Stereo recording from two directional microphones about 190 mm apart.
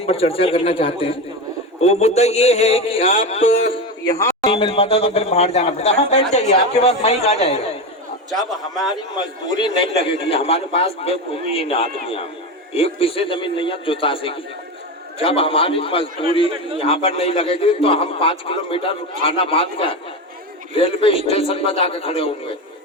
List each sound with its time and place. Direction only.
0.0 s a man's voice: 30° left (ahead or behind)
8.4 s a man's voice: centre (ahead or behind)
9.6 s a man's voice: 25° left (ahead or behind)